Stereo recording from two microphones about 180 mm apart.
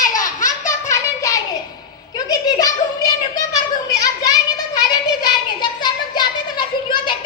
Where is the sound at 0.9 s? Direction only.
15° left (ahead or behind).